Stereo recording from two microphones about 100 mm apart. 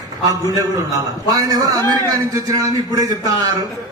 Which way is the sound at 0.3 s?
35° right (ahead or behind).